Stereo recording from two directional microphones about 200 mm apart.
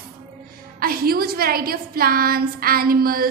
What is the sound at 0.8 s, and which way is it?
A woman's voice, 50° right (ahead or behind).